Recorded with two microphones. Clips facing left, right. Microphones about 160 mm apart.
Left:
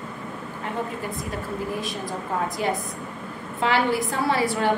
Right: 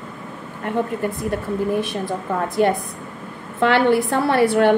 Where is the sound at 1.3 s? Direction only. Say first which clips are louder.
Right 8 dB; 65° right (ahead or behind).